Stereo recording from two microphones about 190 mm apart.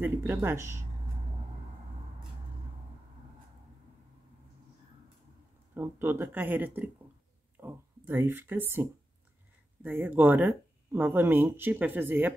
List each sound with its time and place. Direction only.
0.0 s speech: 10° right (ahead or behind)
5.8 s speech: 10° right (ahead or behind)
9.8 s speech: 10° right (ahead or behind)